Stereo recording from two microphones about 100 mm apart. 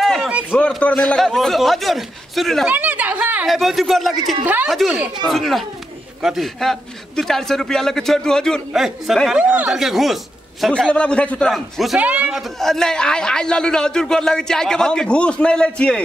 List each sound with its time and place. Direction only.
0.0 s a sound: centre (ahead or behind)
0.5 s a man's voice: 10° left (ahead or behind)
2.6 s a sound: 15° right (ahead or behind)
3.4 s a man's voice: centre (ahead or behind)
9.4 s a man's voice: 10° right (ahead or behind)
10.7 s a man's voice: 10° left (ahead or behind)
11.5 s a man's voice: centre (ahead or behind)
12.0 s a man's voice: 15° right (ahead or behind)
12.4 s a man's voice: 5° left (ahead or behind)